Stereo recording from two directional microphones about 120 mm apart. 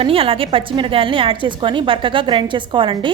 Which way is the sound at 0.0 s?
50° right (ahead or behind).